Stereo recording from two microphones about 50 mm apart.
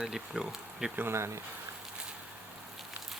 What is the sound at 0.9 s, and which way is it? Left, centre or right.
Speech, right.